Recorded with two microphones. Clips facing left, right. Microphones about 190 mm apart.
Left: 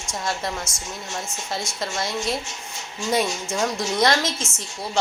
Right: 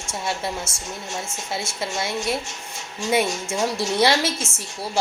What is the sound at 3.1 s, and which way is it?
A woman's voice, 5° right (ahead or behind).